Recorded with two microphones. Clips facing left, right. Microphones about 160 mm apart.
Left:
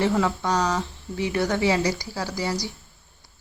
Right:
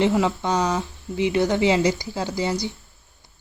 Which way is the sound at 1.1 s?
20° right (ahead or behind).